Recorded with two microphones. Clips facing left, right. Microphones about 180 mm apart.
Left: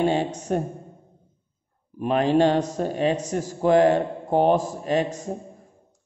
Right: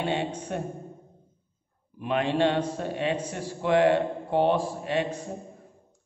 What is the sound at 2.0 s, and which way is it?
Speech, 40° left (ahead or behind).